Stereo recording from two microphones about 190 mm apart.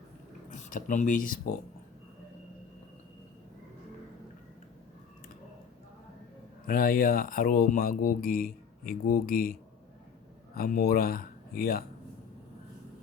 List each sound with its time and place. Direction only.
0.5 s speech: 40° left (ahead or behind)
6.7 s speech: 50° left (ahead or behind)